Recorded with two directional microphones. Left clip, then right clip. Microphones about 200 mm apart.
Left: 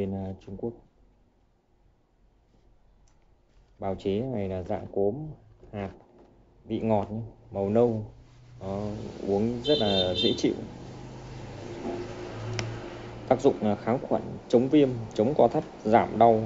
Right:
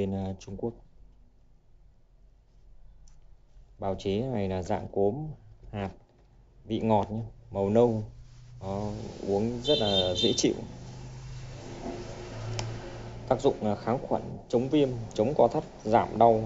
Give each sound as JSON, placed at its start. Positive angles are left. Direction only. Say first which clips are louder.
{"t": 0.0, "sound": "speech", "louder": "right 1 dB", "side_deg": -20}
{"t": 3.8, "sound": "speech", "louder": "left 1 dB", "side_deg": -10}
{"t": 6.7, "sound": "speech", "louder": "right 1 dB", "side_deg": -15}
{"t": 12.6, "sound": "tick", "louder": "left 3 dB", "side_deg": 35}
{"t": 13.3, "sound": "speech", "louder": "left 3 dB", "side_deg": 0}